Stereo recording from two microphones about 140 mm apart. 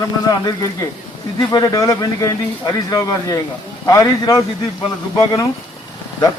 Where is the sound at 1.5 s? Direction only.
25° left (ahead or behind).